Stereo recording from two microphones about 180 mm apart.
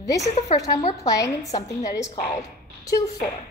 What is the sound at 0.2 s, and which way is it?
Speech, 40° left (ahead or behind).